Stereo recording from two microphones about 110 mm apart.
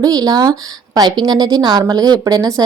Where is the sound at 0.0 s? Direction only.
35° right (ahead or behind).